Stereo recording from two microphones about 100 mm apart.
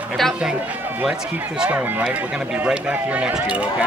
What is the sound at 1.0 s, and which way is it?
Speech, 10° right (ahead or behind).